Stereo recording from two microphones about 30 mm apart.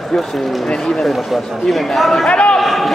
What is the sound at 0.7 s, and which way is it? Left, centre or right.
Speech, left.